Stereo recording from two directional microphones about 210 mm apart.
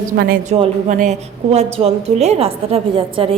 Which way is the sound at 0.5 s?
30° right (ahead or behind).